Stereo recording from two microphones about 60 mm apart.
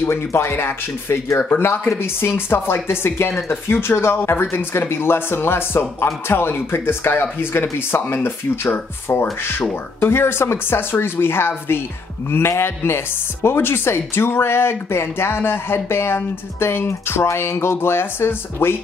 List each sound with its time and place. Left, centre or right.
0.1 s speech: left